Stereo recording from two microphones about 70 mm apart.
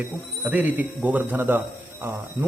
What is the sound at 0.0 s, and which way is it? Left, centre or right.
Speech, right.